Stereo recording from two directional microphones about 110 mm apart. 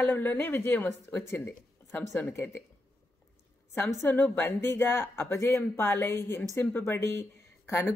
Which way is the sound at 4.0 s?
15° left (ahead or behind).